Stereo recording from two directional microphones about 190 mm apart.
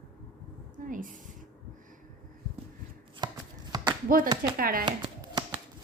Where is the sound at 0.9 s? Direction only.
45° right (ahead or behind).